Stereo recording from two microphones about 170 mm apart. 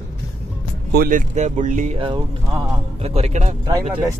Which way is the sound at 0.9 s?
55° right (ahead or behind).